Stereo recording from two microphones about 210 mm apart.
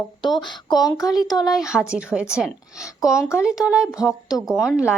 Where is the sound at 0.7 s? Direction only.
15° left (ahead or behind).